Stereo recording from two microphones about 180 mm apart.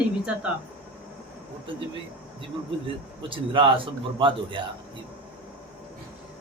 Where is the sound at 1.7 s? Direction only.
30° right (ahead or behind).